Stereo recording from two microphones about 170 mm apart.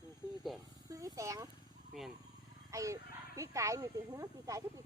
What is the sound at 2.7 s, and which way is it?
Speech, 20° right (ahead or behind).